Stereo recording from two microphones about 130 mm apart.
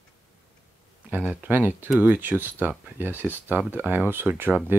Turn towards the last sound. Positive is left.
turn(degrees=-15)  # may be behind; listen again after turning